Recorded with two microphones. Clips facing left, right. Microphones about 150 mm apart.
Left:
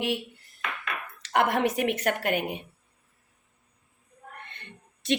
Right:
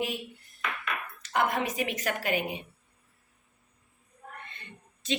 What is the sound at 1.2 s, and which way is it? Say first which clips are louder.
Speech: left 4 dB; 75° left (ahead or behind).